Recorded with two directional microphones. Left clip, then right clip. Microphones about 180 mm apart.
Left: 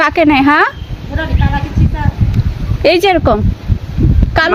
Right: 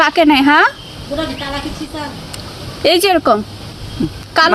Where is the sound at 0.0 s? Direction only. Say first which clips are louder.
Left 1 dB; 40° left (ahead or behind).